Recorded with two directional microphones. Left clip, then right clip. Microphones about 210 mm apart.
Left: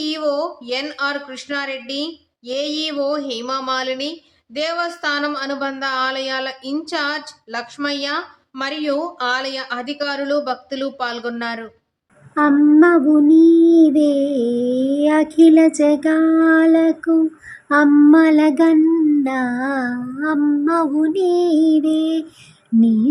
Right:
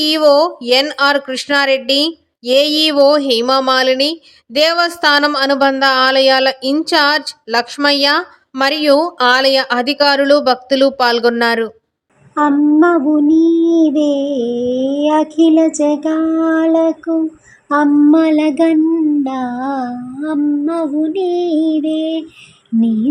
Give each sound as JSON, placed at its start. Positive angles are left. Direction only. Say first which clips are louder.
{"t": 0.0, "sound": "speech", "louder": "right 10 dB", "side_deg": -40}
{"t": 12.3, "sound": "child singing", "louder": "right 1 dB", "side_deg": 0}